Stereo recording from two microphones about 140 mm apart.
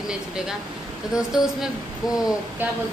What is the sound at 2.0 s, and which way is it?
Speech, 25° left (ahead or behind).